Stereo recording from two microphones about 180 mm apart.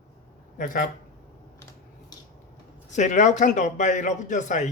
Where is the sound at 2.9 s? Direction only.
40° left (ahead or behind).